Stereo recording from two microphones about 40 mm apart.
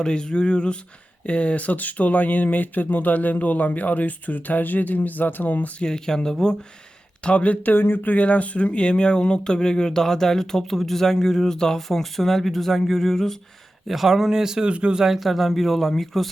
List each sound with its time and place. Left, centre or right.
0.0 s speech: centre; by 5.7 s left
5.8 s speech: centre
7.3 s speech: left
7.8 s speech: left; by 13.3 s centre
13.8 s speech: centre
14.7 s speech: right
15.0 s speech: centre